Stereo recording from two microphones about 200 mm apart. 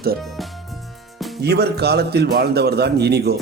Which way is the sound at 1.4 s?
55° right (ahead or behind).